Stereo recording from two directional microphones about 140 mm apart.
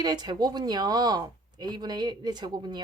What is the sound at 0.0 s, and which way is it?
Speech, 30° right (ahead or behind).